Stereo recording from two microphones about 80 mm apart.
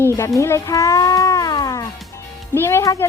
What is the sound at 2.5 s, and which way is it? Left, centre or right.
Speech, left.